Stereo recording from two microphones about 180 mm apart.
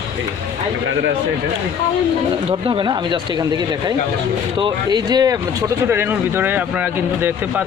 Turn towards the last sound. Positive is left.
turn(degrees=-10)  # may be behind; listen again after turning